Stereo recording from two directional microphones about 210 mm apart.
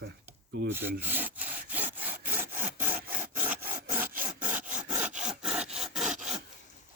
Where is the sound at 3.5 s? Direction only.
45° right (ahead or behind).